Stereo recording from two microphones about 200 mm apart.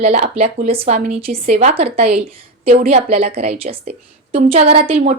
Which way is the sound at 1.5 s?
30° right (ahead or behind).